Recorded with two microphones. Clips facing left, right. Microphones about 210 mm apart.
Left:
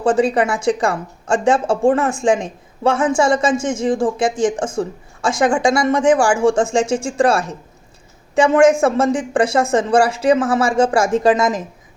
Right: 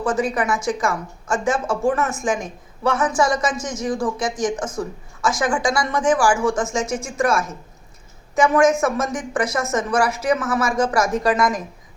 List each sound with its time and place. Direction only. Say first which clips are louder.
0.0 s speech: left 6 dB; 30° left (ahead or behind)